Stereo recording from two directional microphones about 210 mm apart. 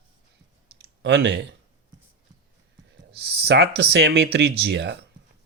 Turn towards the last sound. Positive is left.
turn(degrees=-55)  # may be behind; listen again after turning